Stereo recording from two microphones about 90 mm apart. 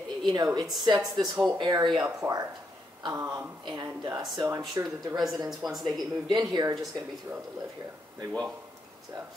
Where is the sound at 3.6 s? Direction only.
50° right (ahead or behind).